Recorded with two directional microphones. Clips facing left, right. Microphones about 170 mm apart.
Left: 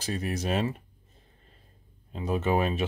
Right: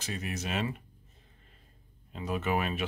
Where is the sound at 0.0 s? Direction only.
35° left (ahead or behind).